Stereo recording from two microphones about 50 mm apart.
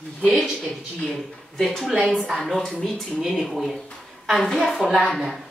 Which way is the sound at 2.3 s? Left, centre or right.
Centre.